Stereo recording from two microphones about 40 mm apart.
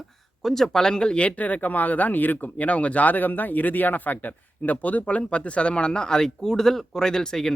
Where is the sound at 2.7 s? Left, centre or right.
Left.